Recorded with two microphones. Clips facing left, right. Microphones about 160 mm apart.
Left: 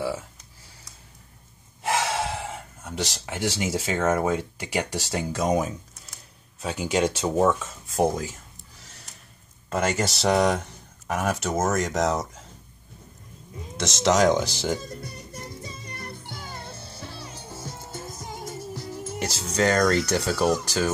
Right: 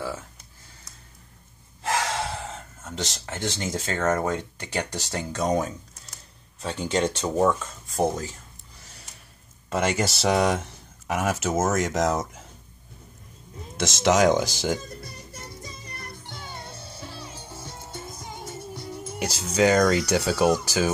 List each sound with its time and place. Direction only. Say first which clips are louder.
1.8 s speech: left 1 dB; 10° left (ahead or behind)
8.8 s a sound: right 1 dB; centre (ahead or behind)
9.7 s speech: even; centre (ahead or behind)
13.7 s speech: even; 5° right (ahead or behind)
16.3 s music: left 1 dB; centre (ahead or behind)
18.2 s speech: left 2 dB; centre (ahead or behind)